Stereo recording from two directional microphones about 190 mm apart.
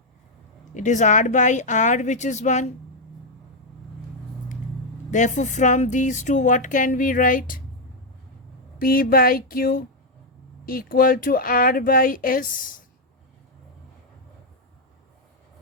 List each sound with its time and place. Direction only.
0.7 s speech: 40° left (ahead or behind)
5.1 s speech: 40° left (ahead or behind)
8.8 s speech: 50° left (ahead or behind)